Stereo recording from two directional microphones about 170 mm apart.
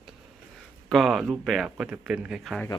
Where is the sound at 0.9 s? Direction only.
Centre (ahead or behind).